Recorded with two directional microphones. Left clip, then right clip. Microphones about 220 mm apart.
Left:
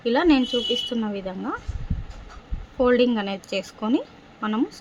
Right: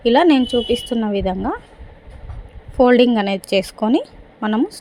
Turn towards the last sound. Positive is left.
turn(degrees=-20)  # may be behind; listen again after turning